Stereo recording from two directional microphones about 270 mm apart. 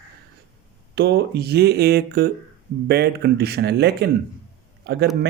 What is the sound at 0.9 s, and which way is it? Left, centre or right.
Speech, right.